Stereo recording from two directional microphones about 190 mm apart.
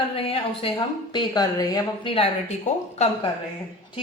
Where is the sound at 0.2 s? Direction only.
30° left (ahead or behind).